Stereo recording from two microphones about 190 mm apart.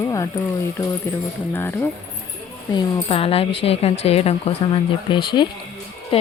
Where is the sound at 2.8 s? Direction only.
30° left (ahead or behind).